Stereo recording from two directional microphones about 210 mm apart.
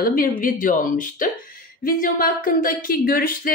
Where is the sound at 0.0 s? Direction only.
40° left (ahead or behind).